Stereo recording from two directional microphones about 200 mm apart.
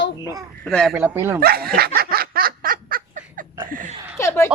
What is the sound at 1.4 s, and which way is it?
Snicker, 50° right (ahead or behind).